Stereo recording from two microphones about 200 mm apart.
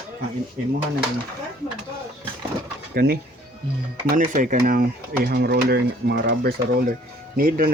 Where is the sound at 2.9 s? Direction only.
50° right (ahead or behind).